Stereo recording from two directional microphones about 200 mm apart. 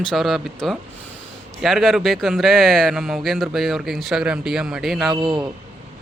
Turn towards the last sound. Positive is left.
turn(degrees=-25)  # may be behind; listen again after turning